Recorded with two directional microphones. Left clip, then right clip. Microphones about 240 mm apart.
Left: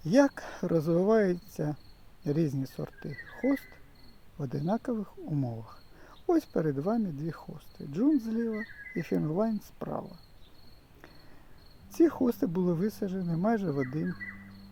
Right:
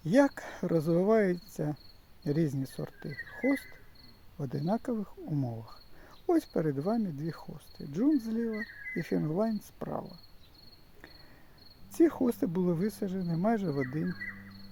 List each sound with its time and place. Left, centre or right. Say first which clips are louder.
0.0 s speech: left 1 dB; centre
3.4 s speech: left 1 dB; centre
4.4 s speech: left 1 dB; centre
11.9 s speech: left 1 dB; centre